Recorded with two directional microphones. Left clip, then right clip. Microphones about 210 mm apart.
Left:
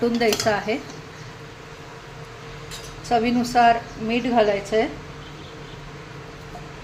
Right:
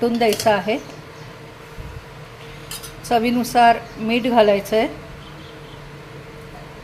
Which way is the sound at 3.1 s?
20° right (ahead or behind).